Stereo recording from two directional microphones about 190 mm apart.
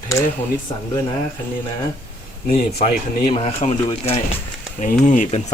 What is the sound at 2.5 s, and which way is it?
Speech, 45° left (ahead or behind).